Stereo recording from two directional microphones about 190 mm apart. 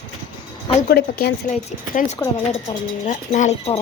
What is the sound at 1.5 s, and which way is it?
Speech, 40° left (ahead or behind).